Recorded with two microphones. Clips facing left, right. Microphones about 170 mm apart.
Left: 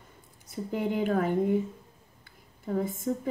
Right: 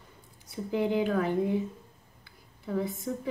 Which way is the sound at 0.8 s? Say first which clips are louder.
Right 1 dB; 50° left (ahead or behind).